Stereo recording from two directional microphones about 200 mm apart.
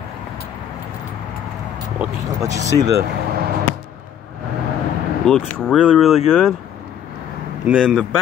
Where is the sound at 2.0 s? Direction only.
15° right (ahead or behind).